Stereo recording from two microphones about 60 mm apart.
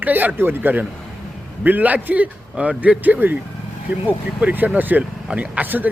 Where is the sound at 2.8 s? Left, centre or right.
Right.